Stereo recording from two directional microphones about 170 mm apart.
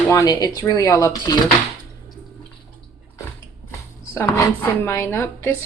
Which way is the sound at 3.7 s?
15° left (ahead or behind).